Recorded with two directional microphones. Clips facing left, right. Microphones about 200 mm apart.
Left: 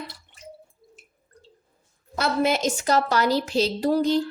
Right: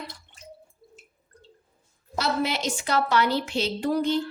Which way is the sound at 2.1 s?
50° left (ahead or behind).